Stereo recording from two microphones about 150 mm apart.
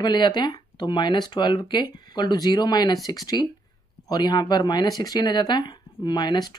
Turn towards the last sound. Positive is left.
turn(degrees=30)  # may be behind; listen again after turning